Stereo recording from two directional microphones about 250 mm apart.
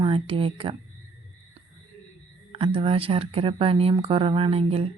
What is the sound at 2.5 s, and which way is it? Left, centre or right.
Speech, right.